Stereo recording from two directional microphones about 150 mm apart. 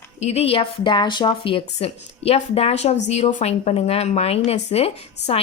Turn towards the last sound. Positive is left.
turn(degrees=45)  # may be behind; listen again after turning